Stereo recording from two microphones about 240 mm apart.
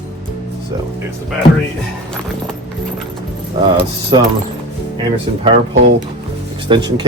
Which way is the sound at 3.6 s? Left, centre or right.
Centre.